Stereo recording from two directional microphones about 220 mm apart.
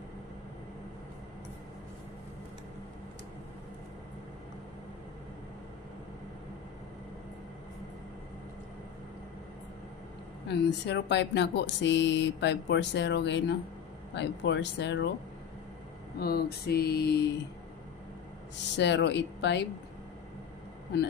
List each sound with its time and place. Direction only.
10.5 s speech: 50° left (ahead or behind)
16.2 s speech: 45° left (ahead or behind)
18.8 s speech: 50° left (ahead or behind)